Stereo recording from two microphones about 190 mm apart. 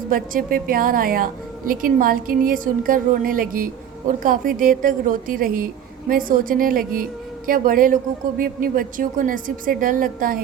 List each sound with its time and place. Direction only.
0.1 s a woman's voice: 50° right (ahead or behind)